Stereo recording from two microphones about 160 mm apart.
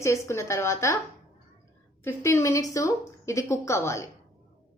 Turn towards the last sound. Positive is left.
turn(degrees=20)  # may be behind; listen again after turning